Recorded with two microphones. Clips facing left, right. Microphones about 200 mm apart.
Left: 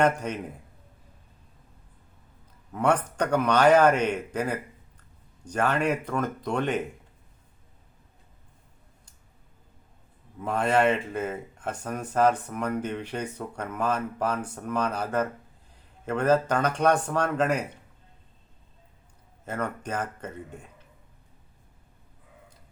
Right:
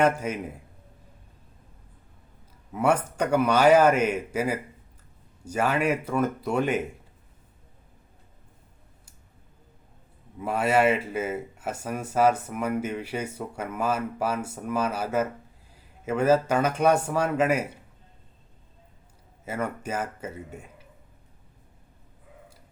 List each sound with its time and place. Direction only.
0.0 s speech: 5° right (ahead or behind)
2.7 s speech: 5° right (ahead or behind)
10.3 s speech: 5° right (ahead or behind)
19.5 s speech: 5° right (ahead or behind)